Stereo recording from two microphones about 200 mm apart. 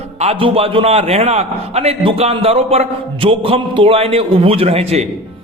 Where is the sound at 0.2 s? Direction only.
30° right (ahead or behind).